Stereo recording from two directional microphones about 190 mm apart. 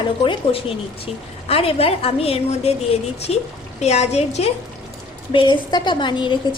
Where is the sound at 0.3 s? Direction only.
30° left (ahead or behind).